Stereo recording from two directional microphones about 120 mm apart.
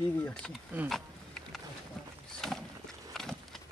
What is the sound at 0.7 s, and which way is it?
Speech, 15° right (ahead or behind).